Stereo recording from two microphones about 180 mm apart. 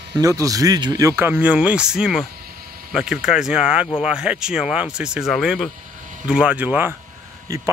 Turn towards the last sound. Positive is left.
turn(degrees=-20)  # may be behind; listen again after turning